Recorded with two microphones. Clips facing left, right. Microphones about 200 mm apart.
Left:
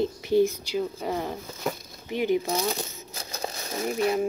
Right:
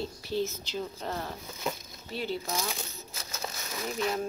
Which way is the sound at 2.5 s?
35° left (ahead or behind).